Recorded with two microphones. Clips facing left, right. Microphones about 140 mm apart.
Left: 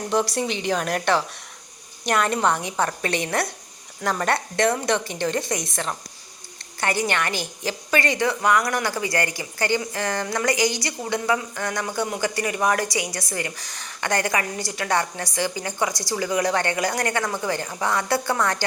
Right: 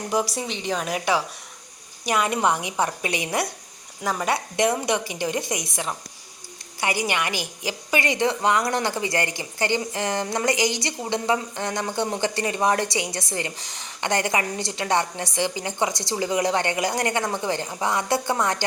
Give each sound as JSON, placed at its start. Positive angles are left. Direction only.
{"t": 0.1, "sound": "a woman's voice", "side_deg": -5}